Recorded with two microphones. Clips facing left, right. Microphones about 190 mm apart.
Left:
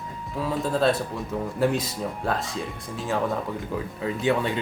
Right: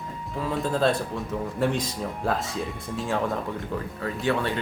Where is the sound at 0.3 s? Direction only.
Centre (ahead or behind).